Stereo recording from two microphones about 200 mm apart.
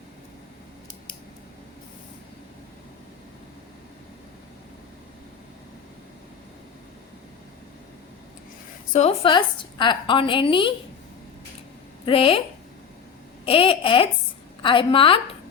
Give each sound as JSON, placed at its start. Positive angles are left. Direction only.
{"t": 8.9, "sound": "a woman's voice", "side_deg": 30}
{"t": 12.0, "sound": "a woman's voice", "side_deg": 25}
{"t": 13.4, "sound": "a woman's voice", "side_deg": 25}